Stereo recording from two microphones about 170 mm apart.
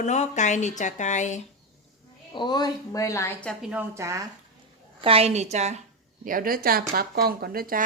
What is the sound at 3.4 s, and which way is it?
Speech, centre (ahead or behind).